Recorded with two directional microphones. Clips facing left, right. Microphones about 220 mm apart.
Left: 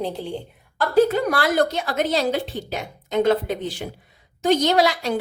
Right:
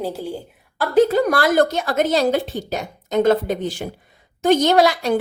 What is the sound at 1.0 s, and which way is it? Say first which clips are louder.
A woman's voice: right 3 dB; 40° right (ahead or behind).